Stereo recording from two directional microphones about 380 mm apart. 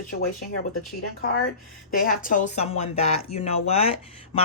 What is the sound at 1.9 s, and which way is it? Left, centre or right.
Speech, left.